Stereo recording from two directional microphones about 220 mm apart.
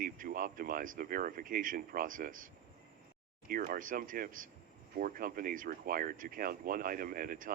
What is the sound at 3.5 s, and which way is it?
Speech, 40° right (ahead or behind).